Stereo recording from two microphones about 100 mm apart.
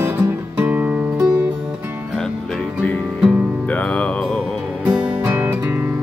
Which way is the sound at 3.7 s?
15° left (ahead or behind).